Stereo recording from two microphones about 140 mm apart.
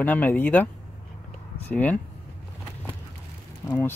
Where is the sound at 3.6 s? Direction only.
25° left (ahead or behind).